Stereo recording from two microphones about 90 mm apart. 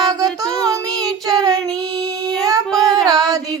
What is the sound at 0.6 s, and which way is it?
Child singing, 40° right (ahead or behind).